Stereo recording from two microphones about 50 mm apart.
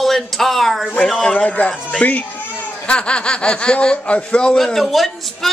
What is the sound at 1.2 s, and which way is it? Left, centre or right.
Speech, left.